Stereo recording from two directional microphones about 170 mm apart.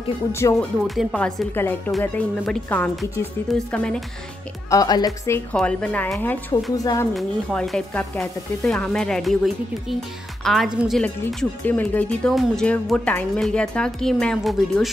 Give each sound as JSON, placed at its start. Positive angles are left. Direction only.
{"t": 0.3, "sound": "speech", "side_deg": 15}
{"t": 0.8, "sound": "speech", "side_deg": 5}
{"t": 4.6, "sound": "speech", "side_deg": 20}
{"t": 5.6, "sound": "speech", "side_deg": 5}
{"t": 6.8, "sound": "speech", "side_deg": 20}
{"t": 7.2, "sound": "speech", "side_deg": 0}